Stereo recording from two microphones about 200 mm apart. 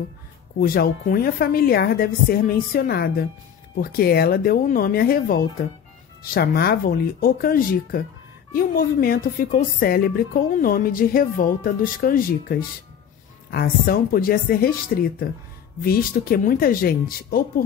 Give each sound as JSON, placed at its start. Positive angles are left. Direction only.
{"t": 0.6, "sound": "a woman's voice", "side_deg": 50}